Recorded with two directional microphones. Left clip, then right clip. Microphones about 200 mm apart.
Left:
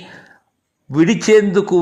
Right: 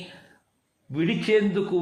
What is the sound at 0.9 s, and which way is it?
Speech, 35° left (ahead or behind).